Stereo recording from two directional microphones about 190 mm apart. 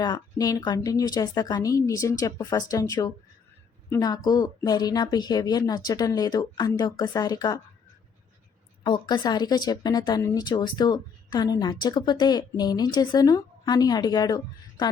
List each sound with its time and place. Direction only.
0.0 s speech: 20° left (ahead or behind)
8.8 s speech: 25° left (ahead or behind)